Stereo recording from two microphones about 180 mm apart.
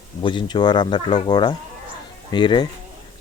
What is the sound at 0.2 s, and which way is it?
Speech, 25° left (ahead or behind).